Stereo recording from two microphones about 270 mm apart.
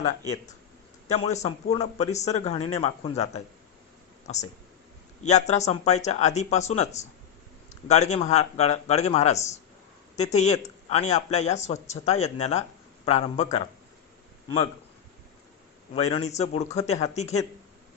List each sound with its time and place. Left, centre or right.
1.1 s speech: left
5.2 s speech: left
16.0 s speech: left